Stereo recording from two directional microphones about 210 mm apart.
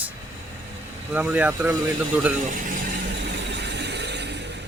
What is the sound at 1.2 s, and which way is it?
Speech, 5° right (ahead or behind).